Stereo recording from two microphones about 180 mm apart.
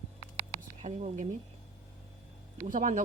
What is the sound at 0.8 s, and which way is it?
Speech, 40° right (ahead or behind).